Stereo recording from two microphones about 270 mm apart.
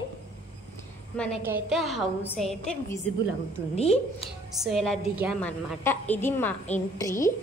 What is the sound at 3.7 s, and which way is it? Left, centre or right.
Speech, left.